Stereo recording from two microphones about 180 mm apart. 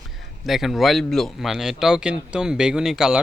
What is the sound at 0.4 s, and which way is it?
Speech, centre (ahead or behind).